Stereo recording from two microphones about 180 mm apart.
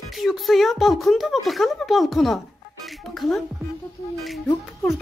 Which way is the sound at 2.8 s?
Centre (ahead or behind).